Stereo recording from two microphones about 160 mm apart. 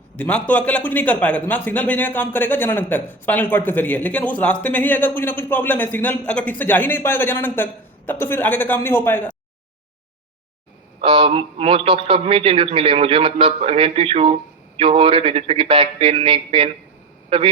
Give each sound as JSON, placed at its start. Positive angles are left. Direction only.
{"t": 0.2, "sound": "a man's voice", "side_deg": 10}
{"t": 11.0, "sound": "a man's voice", "side_deg": -30}